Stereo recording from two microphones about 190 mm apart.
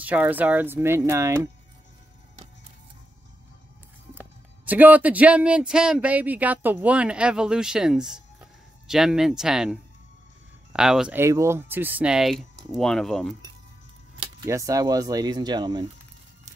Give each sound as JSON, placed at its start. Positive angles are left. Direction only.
{"t": 0.0, "sound": "speech", "side_deg": -10}
{"t": 4.1, "sound": "speech", "side_deg": -10}
{"t": 14.2, "sound": "speech", "side_deg": -20}